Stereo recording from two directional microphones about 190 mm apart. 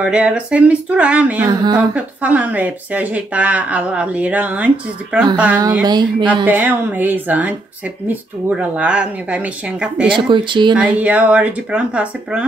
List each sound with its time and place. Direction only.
0.0 s speech: 5° right (ahead or behind)
1.4 s speech: 20° right (ahead or behind)
2.0 s speech: 10° right (ahead or behind)
5.9 s speech: 20° right (ahead or behind)
6.4 s speech: 10° right (ahead or behind)
10.0 s speech: 25° right (ahead or behind)
10.8 s speech: 5° right (ahead or behind)